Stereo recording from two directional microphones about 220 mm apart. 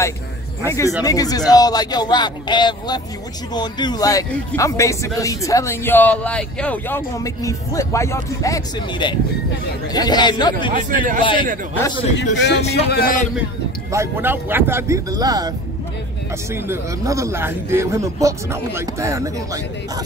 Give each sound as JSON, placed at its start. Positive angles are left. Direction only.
{"t": 0.7, "sound": "speech", "side_deg": 15}
{"t": 10.7, "sound": "a man's voice", "side_deg": -35}
{"t": 12.4, "sound": "a man's voice", "side_deg": 50}
{"t": 13.9, "sound": "a man's voice", "side_deg": -10}
{"t": 16.6, "sound": "a man's voice", "side_deg": -10}